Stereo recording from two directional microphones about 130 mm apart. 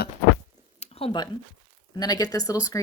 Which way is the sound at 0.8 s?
45° left (ahead or behind).